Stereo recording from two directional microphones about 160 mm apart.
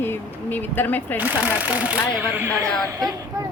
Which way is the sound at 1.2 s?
10° right (ahead or behind).